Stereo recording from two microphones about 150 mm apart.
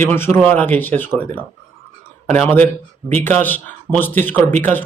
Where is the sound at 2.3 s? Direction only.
10° left (ahead or behind).